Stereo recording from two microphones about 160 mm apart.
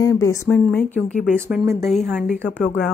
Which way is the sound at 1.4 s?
15° right (ahead or behind).